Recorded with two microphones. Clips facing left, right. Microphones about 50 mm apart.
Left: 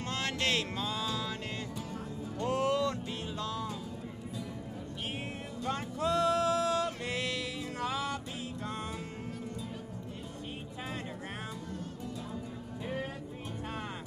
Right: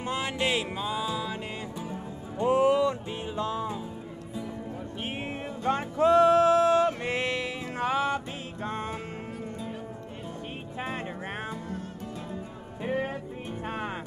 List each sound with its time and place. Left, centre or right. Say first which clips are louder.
0.0 s music: right 4 dB; centre
5.6 s music: right 9 dB; right
12.8 s music: right 8 dB; right